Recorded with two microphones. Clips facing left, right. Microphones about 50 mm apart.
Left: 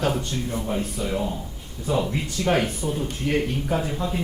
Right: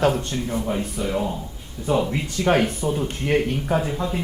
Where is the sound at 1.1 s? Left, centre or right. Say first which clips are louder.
Right 2 dB; centre; by 3.4 s right.